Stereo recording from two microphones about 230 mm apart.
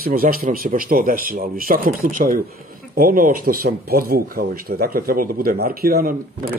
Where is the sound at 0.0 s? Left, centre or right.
Right.